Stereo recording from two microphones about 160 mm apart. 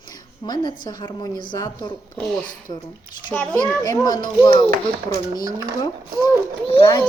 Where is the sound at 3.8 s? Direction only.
25° left (ahead or behind).